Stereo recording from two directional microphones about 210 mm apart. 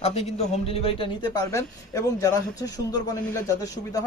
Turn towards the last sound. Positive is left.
turn(degrees=15)  # may be behind; listen again after turning